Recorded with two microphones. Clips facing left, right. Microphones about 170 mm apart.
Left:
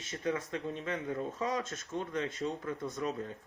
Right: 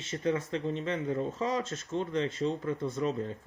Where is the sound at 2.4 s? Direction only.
10° right (ahead or behind).